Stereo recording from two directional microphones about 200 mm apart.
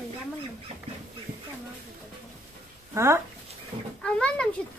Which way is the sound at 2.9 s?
15° right (ahead or behind).